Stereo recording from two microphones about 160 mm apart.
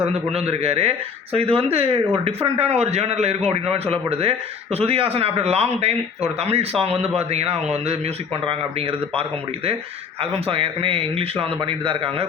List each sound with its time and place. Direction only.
0.3 s speech: 40° right (ahead or behind)